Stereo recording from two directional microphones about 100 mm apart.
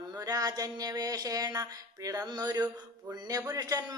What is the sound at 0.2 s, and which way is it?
Speech, 40° right (ahead or behind).